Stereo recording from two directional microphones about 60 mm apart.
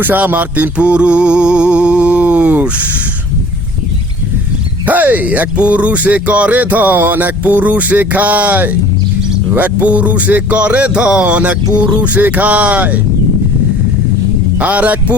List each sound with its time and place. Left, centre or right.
0.0 s speech: right
4.9 s speech: right
14.6 s speech: right